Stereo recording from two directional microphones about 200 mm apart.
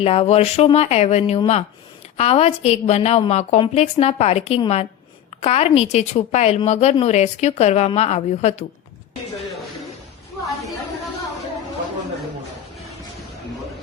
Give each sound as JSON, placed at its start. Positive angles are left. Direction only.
{"t": 0.0, "sound": "a woman's voice", "side_deg": 30}